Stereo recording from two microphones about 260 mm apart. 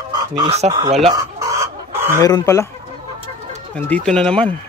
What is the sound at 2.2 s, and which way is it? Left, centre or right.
Speech, centre.